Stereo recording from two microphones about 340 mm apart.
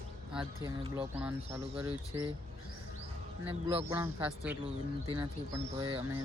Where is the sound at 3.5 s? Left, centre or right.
Centre.